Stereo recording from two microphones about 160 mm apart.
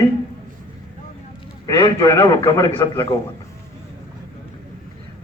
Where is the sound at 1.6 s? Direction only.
20° left (ahead or behind).